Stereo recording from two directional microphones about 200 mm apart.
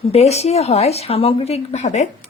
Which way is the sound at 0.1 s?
30° left (ahead or behind).